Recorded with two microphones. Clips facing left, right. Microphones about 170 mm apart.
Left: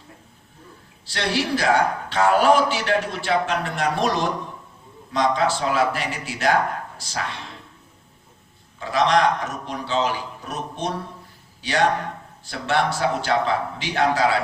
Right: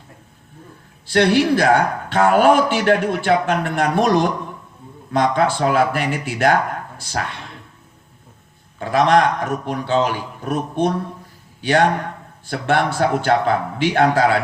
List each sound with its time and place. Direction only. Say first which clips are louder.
1.0 s speech: right 9 dB; 55° right (ahead or behind)
8.8 s speech: right 4 dB; 55° right (ahead or behind)